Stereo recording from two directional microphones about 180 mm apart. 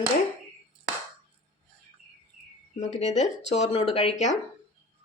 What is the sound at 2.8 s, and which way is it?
Speech, 40° left (ahead or behind).